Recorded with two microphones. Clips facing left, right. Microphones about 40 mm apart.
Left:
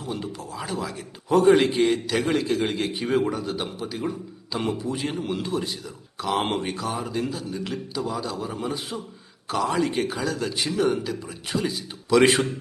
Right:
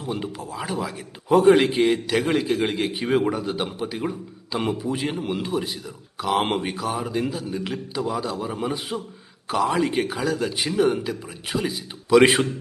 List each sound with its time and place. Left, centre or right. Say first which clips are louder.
0.0 s a man's voice: right 2 dB; centre